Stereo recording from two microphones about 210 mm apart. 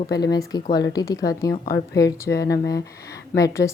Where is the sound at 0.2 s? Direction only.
20° left (ahead or behind).